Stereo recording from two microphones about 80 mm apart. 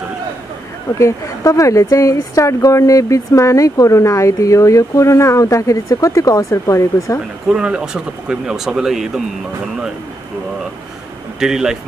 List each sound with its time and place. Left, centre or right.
0.9 s speech: left
7.4 s speech: centre
11.3 s speech: centre